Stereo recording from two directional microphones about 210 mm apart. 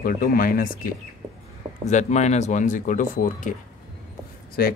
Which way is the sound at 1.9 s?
35° left (ahead or behind).